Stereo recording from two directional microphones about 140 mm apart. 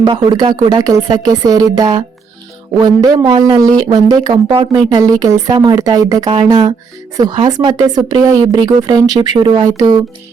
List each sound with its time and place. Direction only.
0.0 s speech: 35° right (ahead or behind)